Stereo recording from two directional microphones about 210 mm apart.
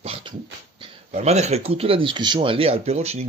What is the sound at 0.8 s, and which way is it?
Speech, 30° right (ahead or behind).